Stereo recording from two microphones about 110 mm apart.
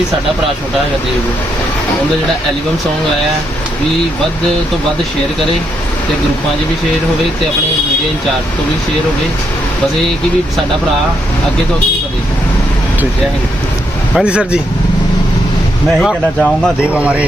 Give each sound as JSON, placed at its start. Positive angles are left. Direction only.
{"t": 14.2, "sound": "speech", "side_deg": -10}
{"t": 16.0, "sound": "speech", "side_deg": 5}
{"t": 16.8, "sound": "speech", "side_deg": -10}